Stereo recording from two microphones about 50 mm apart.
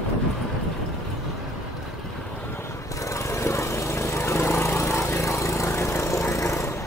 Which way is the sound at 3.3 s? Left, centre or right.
Left.